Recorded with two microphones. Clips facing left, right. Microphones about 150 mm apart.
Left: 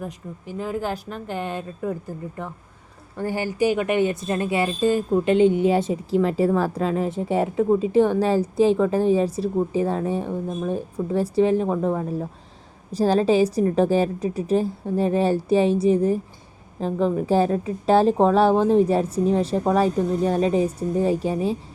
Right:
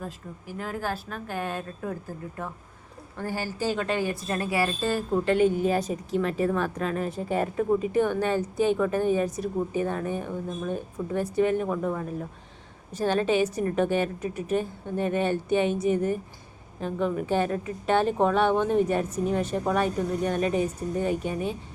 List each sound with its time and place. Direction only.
0.0 s speech: 20° left (ahead or behind)
3.2 s a woman's voice: 15° left (ahead or behind); by 21.6 s 35° left (ahead or behind)